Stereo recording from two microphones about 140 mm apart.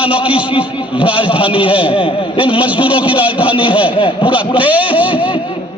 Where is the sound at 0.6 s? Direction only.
10° right (ahead or behind).